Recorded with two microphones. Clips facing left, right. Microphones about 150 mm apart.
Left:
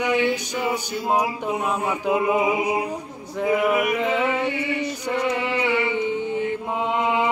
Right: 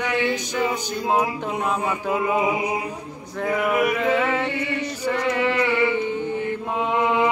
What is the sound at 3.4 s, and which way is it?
Chant, 15° left (ahead or behind).